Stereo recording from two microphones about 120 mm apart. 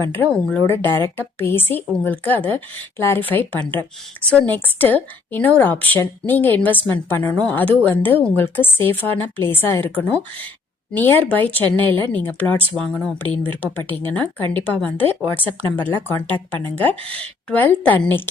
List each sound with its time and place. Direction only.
0.0 s a woman's voice: 15° left (ahead or behind)